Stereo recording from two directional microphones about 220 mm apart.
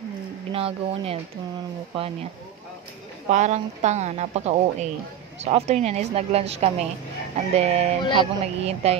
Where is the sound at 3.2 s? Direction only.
30° right (ahead or behind).